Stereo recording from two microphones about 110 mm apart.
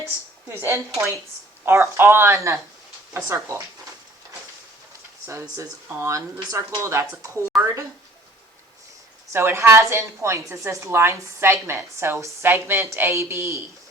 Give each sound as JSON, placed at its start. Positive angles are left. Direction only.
{"t": 0.0, "sound": "a sound", "side_deg": -20}
{"t": 1.6, "sound": "a woman's voice", "side_deg": -25}
{"t": 5.2, "sound": "a woman's voice", "side_deg": -25}
{"t": 9.3, "sound": "a woman's voice", "side_deg": -20}